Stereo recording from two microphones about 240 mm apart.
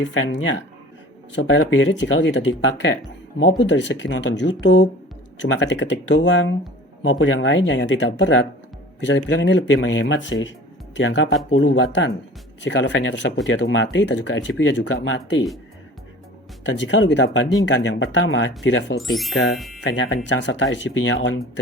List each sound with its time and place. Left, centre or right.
0.0 s speech: left
16.6 s speech: left
19.5 s speech: centre
20.2 s speech: left